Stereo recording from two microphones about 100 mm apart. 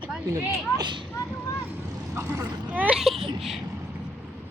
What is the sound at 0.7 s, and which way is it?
Speech, 50° right (ahead or behind).